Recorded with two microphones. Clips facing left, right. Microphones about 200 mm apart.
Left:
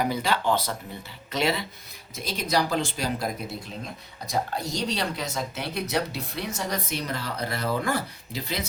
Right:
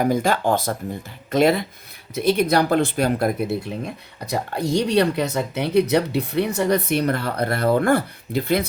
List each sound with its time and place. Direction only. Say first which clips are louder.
0.0 s speech: right 6 dB; 50° right (ahead or behind)
2.1 s speech: right 9 dB; 60° right (ahead or behind)